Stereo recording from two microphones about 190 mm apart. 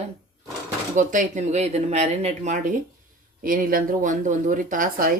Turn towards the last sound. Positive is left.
turn(degrees=-45)  # may be behind; listen again after turning